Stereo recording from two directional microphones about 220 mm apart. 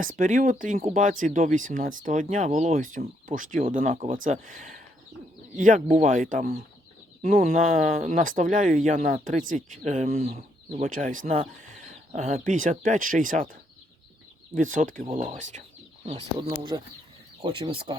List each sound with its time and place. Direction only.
0.0 s speech: 40° right (ahead or behind)
10.8 s speech: 40° right (ahead or behind)
15.0 s speech: 25° right (ahead or behind)
16.5 s speech: 20° right (ahead or behind)